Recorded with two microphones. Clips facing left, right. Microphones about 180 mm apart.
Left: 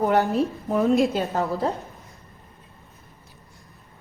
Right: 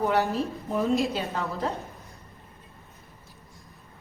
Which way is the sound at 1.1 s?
40° left (ahead or behind).